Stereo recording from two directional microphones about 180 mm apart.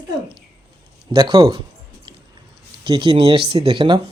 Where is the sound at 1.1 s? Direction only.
25° right (ahead or behind).